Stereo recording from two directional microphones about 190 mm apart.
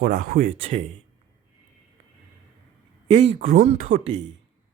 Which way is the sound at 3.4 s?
40° right (ahead or behind).